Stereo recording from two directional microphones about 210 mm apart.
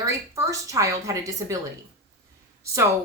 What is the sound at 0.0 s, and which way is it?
A woman's voice, 15° right (ahead or behind).